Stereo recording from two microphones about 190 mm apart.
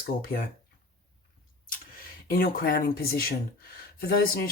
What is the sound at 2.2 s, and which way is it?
Speech, 50° left (ahead or behind).